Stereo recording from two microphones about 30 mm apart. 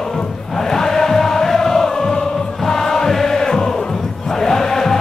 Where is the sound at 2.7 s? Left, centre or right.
Centre.